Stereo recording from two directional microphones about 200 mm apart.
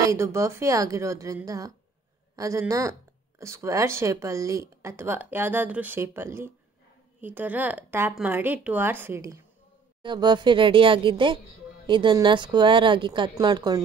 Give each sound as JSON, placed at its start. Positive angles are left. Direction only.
{"t": 0.0, "sound": "a woman's voice", "side_deg": -15}